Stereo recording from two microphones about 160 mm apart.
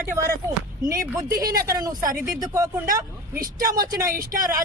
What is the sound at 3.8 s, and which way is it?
Speech, 20° right (ahead or behind).